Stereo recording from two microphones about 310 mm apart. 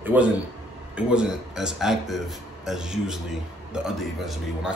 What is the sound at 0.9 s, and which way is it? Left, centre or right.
Speech, centre.